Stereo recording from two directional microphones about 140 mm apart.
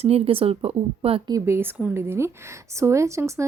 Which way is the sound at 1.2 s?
20° right (ahead or behind).